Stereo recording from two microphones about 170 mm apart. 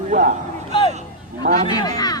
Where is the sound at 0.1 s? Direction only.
50° right (ahead or behind).